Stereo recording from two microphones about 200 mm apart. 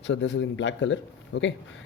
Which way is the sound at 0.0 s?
65° left (ahead or behind).